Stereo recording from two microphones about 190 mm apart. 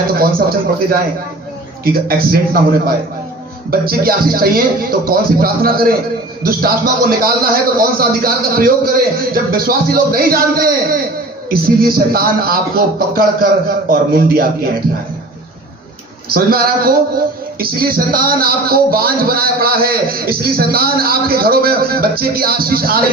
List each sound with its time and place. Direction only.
0.2 s a sound: 50° right (ahead or behind)
1.8 s speech: 50° right (ahead or behind)
16.3 s speech: 50° right (ahead or behind)